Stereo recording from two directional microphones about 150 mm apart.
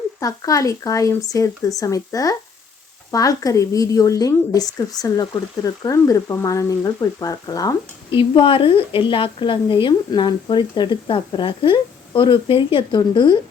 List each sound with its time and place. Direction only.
0.2 s a woman's voice: 25° left (ahead or behind)